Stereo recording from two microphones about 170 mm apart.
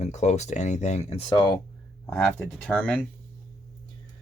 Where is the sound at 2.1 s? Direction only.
5° left (ahead or behind).